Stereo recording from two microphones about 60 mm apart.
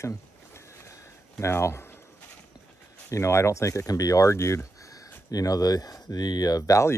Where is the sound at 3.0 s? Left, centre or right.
Left.